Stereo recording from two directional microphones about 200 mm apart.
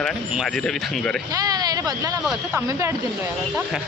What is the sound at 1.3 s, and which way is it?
Speech, 20° right (ahead or behind).